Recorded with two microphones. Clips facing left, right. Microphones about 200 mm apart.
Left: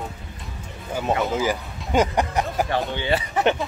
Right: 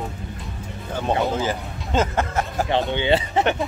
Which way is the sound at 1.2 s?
10° left (ahead or behind).